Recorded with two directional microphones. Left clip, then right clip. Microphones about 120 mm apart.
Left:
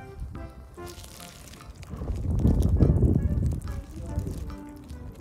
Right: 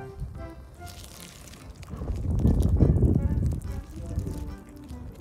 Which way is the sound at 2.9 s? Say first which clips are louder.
Even; 20° left (ahead or behind).